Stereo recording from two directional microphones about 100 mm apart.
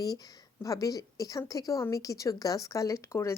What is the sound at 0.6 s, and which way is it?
A woman's voice, 35° left (ahead or behind).